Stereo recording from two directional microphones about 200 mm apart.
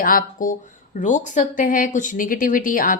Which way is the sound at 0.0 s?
45° left (ahead or behind).